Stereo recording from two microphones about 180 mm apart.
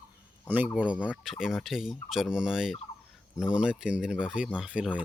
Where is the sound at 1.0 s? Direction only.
10° left (ahead or behind).